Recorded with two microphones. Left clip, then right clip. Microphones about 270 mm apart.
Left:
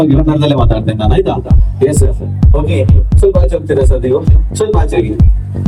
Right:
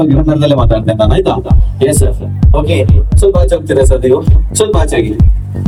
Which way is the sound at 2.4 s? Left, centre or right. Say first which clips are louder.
Right 2 dB; centre.